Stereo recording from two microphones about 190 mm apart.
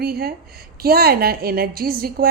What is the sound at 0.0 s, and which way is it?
A woman's voice, 55° right (ahead or behind).